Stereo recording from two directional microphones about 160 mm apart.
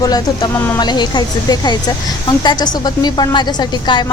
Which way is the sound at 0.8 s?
25° left (ahead or behind).